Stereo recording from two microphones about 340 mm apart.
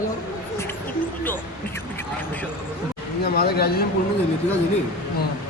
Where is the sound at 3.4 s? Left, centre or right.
Left.